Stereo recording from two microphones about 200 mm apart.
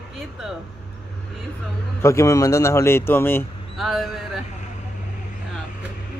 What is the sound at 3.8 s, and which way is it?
Speech, centre (ahead or behind).